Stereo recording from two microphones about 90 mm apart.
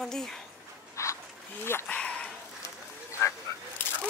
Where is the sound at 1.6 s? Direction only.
30° left (ahead or behind).